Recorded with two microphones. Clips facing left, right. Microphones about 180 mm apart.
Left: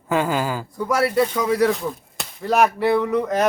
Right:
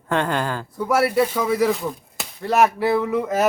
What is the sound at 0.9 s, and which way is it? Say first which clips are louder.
Speech: right 1 dB; 5° right (ahead or behind).